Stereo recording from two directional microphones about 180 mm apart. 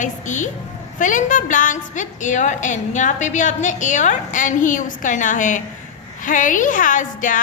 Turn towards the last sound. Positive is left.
turn(degrees=45)  # may be behind; listen again after turning